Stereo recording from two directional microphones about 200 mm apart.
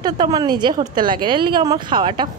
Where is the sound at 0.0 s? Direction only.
20° right (ahead or behind).